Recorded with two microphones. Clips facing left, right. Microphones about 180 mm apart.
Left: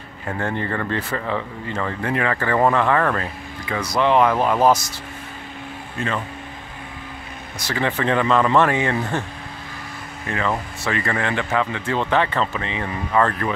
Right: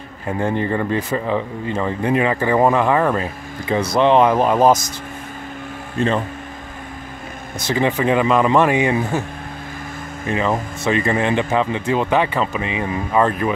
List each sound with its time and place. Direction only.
0.3 s speech: 15° right (ahead or behind)
3.6 s speech: 25° right (ahead or behind)
5.9 s speech: 30° right (ahead or behind)
7.5 s speech: 20° right (ahead or behind)
10.2 s speech: 20° right (ahead or behind)